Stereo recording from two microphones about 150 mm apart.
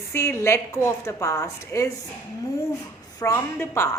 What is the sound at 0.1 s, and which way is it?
A woman's voice, 15° left (ahead or behind).